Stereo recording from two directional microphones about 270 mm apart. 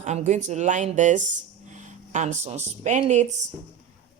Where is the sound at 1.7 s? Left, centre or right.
Right.